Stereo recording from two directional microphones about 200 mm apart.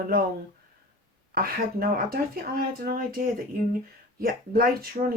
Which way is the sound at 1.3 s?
50° right (ahead or behind).